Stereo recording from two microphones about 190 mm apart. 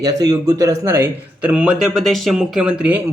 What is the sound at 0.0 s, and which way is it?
Speech, 20° right (ahead or behind).